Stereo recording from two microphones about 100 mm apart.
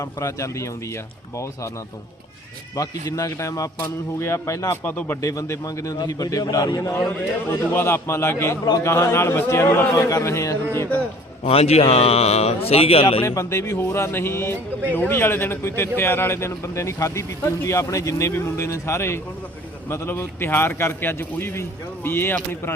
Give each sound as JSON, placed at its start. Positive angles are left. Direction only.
{"t": 0.0, "sound": "speech", "side_deg": 30}
{"t": 2.7, "sound": "speech", "side_deg": 35}
{"t": 5.2, "sound": "speech", "side_deg": 30}
{"t": 7.5, "sound": "speech", "side_deg": 25}
{"t": 11.4, "sound": "speech", "side_deg": 90}
{"t": 13.2, "sound": "speech", "side_deg": 30}